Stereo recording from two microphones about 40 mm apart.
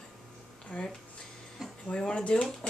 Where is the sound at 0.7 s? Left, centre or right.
Left.